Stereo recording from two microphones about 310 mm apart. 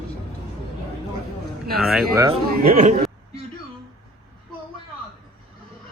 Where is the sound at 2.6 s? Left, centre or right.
Right.